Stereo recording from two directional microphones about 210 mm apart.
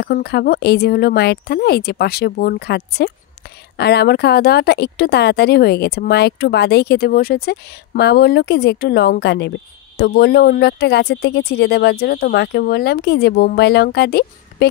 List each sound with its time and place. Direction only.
0.0 s a woman's voice: 50° left (ahead or behind)